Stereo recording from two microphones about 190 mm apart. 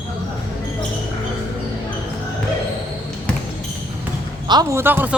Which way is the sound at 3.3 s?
5° left (ahead or behind).